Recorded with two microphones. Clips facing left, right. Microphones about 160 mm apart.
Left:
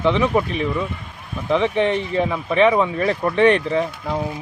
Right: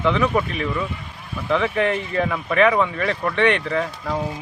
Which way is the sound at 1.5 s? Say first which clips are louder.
Left 2 dB; 25° left (ahead or behind).